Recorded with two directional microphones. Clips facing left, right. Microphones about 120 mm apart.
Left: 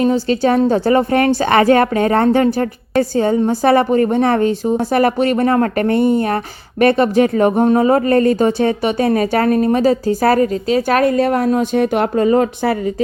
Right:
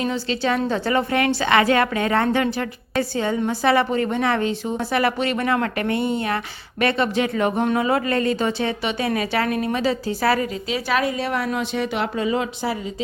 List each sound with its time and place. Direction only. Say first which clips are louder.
0.0 s a woman's voice: left 9 dB; 40° left (ahead or behind)